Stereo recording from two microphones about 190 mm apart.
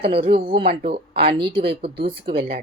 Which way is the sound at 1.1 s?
55° right (ahead or behind).